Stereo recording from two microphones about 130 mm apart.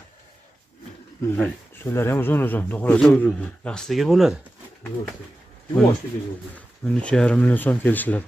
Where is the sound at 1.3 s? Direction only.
15° left (ahead or behind).